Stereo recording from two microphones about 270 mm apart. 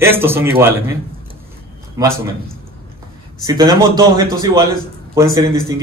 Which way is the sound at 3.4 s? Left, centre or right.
Centre.